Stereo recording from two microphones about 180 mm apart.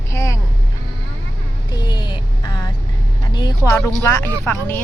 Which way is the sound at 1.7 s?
25° left (ahead or behind).